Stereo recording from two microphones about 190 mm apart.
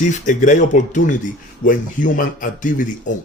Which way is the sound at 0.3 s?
40° left (ahead or behind).